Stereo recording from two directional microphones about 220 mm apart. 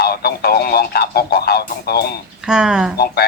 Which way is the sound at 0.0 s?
45° left (ahead or behind).